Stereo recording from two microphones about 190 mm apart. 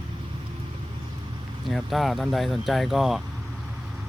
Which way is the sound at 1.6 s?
Centre (ahead or behind).